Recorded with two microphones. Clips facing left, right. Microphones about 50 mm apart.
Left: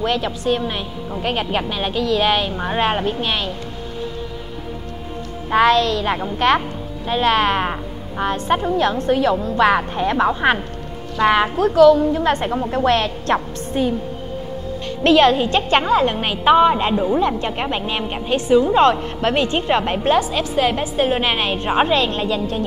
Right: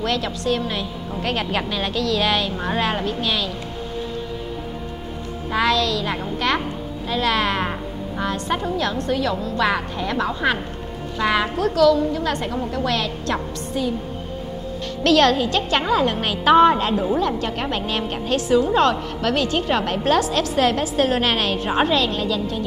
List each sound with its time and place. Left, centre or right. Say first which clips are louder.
0.0 s a woman's voice: left 3 dB; centre
5.5 s a woman's voice: left 5 dB; left
15.0 s a woman's voice: left 3 dB; centre
15.3 s a woman's voice: left 4 dB; left
16.5 s a woman's voice: right 1 dB; centre
17.2 s a woman's voice: left 3 dB; left
18.9 s a woman's voice: left 3 dB; left